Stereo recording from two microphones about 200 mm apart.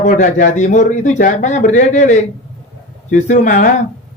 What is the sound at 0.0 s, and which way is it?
A man's voice, 40° left (ahead or behind).